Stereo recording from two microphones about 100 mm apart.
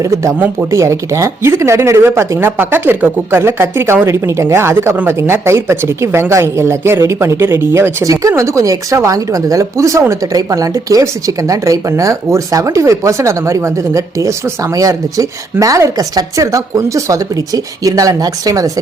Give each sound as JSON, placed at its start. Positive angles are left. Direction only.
{"t": 0.0, "sound": "speech", "side_deg": -30}